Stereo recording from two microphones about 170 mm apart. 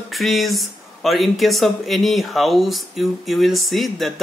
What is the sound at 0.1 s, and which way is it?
Speech, centre (ahead or behind).